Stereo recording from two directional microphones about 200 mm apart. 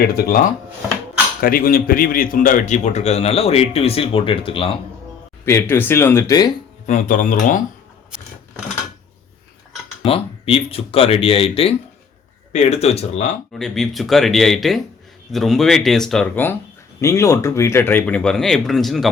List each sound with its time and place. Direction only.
0.0 s a man's voice: 50° left (ahead or behind); by 4.8 s 25° left (ahead or behind)
5.5 s speech: 10° left (ahead or behind)
6.8 s a man's voice: 40° left (ahead or behind)
10.0 s a man's voice: 30° left (ahead or behind)
13.5 s speech: centre (ahead or behind)